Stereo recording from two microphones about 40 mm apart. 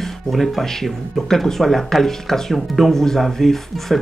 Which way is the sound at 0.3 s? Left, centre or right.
Centre.